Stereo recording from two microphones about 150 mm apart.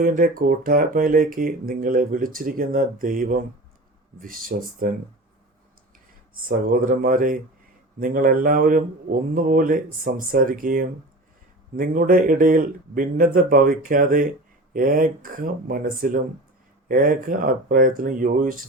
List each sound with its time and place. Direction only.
0.0 s speech: 70° right (ahead or behind)
6.3 s speech: 70° right (ahead or behind)